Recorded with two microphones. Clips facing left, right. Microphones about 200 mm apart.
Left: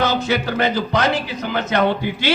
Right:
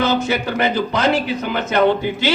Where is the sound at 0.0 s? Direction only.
55° right (ahead or behind).